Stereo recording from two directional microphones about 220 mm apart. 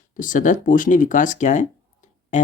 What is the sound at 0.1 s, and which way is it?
Speech, 35° left (ahead or behind).